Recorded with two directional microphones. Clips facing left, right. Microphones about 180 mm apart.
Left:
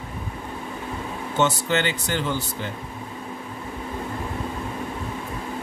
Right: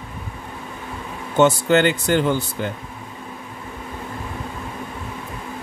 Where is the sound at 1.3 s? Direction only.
50° right (ahead or behind).